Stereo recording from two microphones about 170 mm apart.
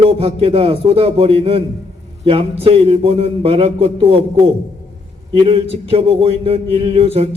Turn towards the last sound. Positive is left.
turn(degrees=-35)  # may be behind; listen again after turning